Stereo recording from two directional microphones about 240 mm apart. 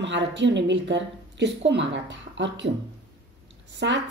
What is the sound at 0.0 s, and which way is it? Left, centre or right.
Speech, right.